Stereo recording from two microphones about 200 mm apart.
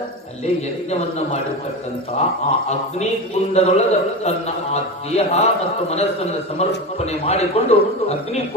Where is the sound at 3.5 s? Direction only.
35° left (ahead or behind).